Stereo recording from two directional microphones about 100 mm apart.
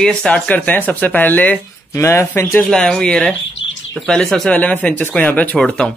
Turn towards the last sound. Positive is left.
turn(degrees=10)  # may be behind; listen again after turning